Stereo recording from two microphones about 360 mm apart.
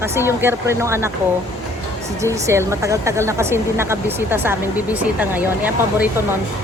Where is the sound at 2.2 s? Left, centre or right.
Centre.